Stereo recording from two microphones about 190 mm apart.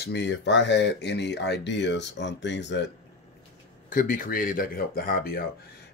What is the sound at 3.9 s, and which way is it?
Speech, 45° left (ahead or behind).